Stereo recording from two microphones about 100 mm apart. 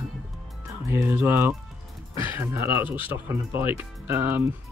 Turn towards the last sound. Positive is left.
turn(degrees=-20)  # may be behind; listen again after turning